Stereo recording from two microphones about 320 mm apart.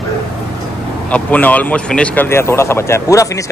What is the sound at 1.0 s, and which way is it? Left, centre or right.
Speech, centre.